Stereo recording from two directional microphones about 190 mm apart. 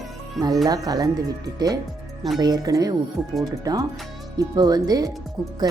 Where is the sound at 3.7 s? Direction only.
20° right (ahead or behind).